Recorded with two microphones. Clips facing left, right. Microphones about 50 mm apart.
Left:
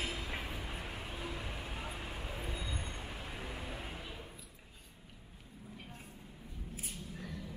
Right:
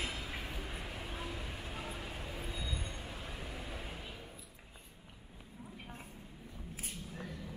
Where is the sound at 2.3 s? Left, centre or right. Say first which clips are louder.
Left 1 dB; left.